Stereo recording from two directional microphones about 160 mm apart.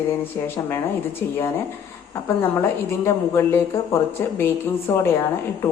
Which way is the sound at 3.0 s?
15° left (ahead or behind).